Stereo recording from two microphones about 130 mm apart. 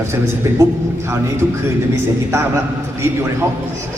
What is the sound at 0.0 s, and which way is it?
A man's voice, 20° right (ahead or behind).